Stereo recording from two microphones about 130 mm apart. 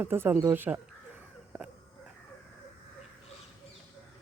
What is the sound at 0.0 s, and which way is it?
Speech, 15° right (ahead or behind).